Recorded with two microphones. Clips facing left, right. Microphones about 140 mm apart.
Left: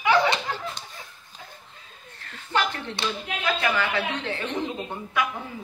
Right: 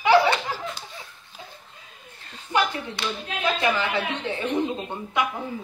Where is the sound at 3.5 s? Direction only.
25° right (ahead or behind).